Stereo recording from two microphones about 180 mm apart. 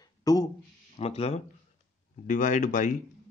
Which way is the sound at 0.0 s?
20° left (ahead or behind).